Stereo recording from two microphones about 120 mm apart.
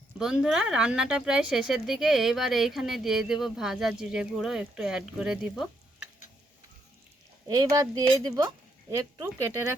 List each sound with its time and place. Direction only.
0.2 s speech: 5° right (ahead or behind)
7.4 s speech: 30° right (ahead or behind)